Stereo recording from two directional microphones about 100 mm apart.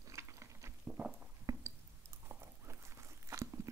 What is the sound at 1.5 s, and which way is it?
Chewing, 30° right (ahead or behind).